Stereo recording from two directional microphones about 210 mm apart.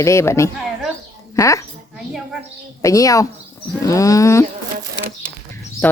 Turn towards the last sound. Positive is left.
turn(degrees=10)  # may be behind; listen again after turning